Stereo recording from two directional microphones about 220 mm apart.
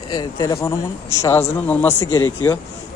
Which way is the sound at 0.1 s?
15° left (ahead or behind).